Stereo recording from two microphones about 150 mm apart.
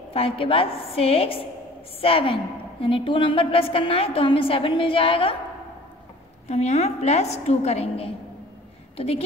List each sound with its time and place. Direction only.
0.1 s a woman's voice: 40° left (ahead or behind)
6.4 s a woman's voice: 45° left (ahead or behind)